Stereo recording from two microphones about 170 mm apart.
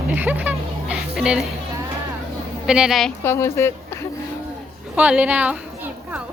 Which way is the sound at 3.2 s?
15° left (ahead or behind).